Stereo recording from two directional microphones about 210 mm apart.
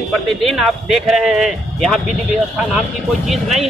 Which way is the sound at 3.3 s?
Centre (ahead or behind).